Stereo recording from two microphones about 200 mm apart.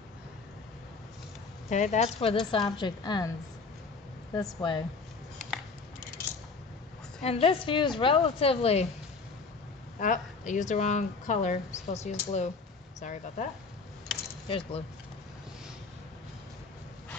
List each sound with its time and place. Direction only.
1.7 s a woman's voice: 35° left (ahead or behind)
4.4 s a woman's voice: 20° left (ahead or behind)
7.2 s a woman's voice: 30° left (ahead or behind)
9.9 s a woman's voice: 40° left (ahead or behind)
14.5 s a woman's voice: 30° left (ahead or behind)